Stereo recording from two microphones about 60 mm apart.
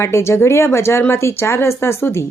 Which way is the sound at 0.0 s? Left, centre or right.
Left.